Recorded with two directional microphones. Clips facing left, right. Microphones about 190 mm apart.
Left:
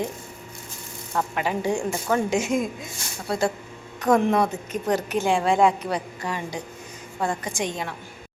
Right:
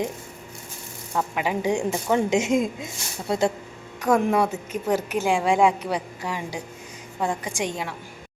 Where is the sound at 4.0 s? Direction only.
10° right (ahead or behind).